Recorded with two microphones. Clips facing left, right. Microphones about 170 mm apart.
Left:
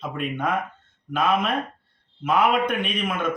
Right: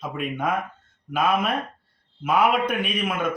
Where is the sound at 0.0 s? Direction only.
5° right (ahead or behind).